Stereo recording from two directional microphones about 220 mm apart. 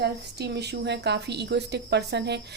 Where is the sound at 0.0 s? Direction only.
50° right (ahead or behind).